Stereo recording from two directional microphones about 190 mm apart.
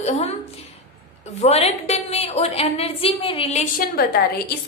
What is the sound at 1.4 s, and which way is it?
A woman's voice, 35° left (ahead or behind).